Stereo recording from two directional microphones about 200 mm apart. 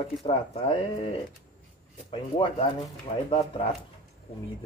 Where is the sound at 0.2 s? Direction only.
30° left (ahead or behind).